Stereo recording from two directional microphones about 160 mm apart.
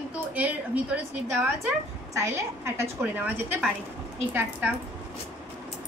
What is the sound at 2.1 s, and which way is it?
A woman's voice, 20° right (ahead or behind).